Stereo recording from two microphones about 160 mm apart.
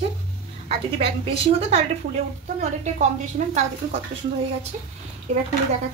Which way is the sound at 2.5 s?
50° right (ahead or behind).